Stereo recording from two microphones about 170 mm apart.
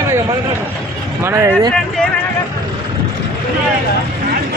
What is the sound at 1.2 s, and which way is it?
Speech, 15° right (ahead or behind).